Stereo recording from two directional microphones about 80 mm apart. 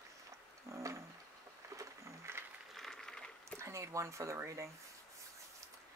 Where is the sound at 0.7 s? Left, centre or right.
Right.